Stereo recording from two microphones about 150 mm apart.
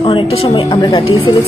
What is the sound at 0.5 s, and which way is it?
Music, 30° left (ahead or behind).